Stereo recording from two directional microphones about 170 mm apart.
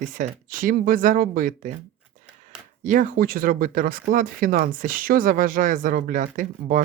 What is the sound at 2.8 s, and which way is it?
Speech, 50° right (ahead or behind).